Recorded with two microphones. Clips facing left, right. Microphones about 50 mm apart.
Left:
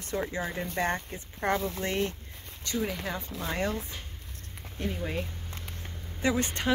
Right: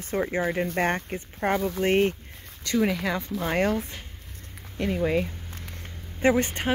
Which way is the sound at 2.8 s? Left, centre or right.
Right.